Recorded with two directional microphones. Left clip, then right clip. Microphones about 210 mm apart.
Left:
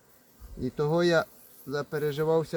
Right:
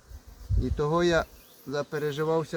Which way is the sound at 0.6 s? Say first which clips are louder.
Even; 15° left (ahead or behind).